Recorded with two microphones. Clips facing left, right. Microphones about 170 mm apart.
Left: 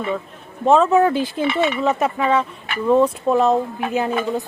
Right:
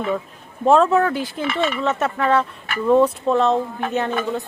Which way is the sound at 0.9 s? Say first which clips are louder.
Left 3 dB; 15° left (ahead or behind).